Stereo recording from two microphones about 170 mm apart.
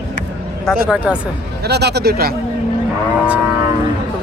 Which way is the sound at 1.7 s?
75° right (ahead or behind).